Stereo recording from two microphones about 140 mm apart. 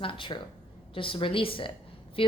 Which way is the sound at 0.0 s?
40° left (ahead or behind).